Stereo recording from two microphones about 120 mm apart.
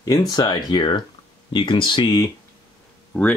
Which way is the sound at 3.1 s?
15° left (ahead or behind).